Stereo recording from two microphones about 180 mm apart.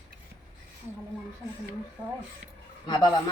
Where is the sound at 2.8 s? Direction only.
25° left (ahead or behind).